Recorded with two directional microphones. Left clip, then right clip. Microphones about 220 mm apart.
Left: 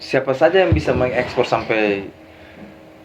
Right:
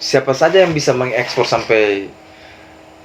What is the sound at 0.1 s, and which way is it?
A man's voice, 25° left (ahead or behind).